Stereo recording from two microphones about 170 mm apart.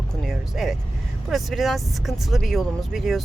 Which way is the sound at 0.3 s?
Centre (ahead or behind).